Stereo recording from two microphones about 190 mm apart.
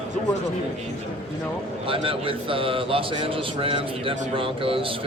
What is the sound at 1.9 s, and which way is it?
A man's voice, 30° right (ahead or behind).